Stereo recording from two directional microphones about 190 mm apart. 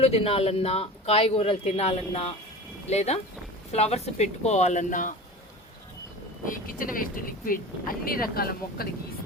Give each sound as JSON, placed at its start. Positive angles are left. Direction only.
{"t": 0.0, "sound": "speech", "side_deg": 30}
{"t": 6.4, "sound": "speech", "side_deg": 45}